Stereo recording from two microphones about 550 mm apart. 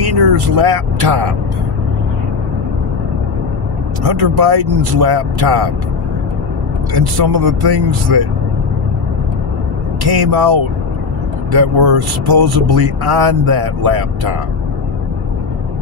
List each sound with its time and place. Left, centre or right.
0.0 s speech: right
4.0 s speech: right
6.9 s speech: right
10.0 s speech: right